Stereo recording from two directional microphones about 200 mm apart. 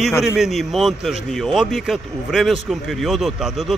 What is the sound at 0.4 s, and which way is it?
Speech, centre (ahead or behind).